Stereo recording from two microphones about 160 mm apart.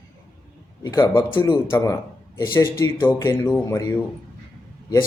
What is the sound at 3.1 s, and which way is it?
Speech, 15° left (ahead or behind).